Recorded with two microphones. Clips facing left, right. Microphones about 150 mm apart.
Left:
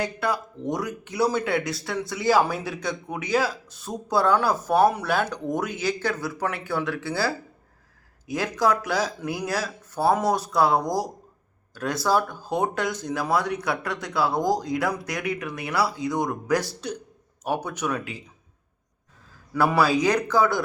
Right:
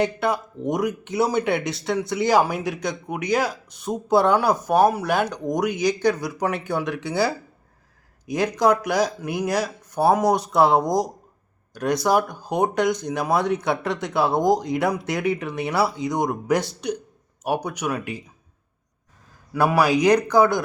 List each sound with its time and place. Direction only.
0.0 s speech: 20° right (ahead or behind)
19.5 s speech: 15° right (ahead or behind)